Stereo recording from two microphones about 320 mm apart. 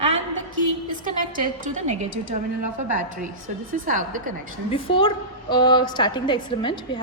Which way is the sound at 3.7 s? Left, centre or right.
Right.